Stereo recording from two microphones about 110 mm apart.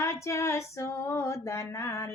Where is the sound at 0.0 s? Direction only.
25° left (ahead or behind).